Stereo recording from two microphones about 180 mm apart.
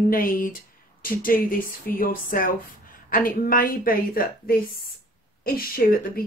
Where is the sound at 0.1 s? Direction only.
50° left (ahead or behind).